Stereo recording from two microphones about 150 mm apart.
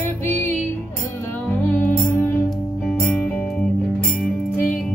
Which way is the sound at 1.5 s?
15° left (ahead or behind).